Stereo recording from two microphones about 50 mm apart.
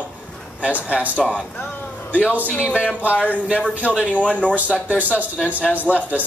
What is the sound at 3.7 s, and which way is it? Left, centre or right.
Speech, right.